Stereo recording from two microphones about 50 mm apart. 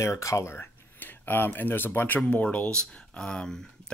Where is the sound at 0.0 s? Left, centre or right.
Left.